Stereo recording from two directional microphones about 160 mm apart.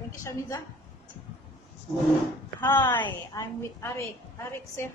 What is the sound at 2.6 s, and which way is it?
Speech, 15° left (ahead or behind).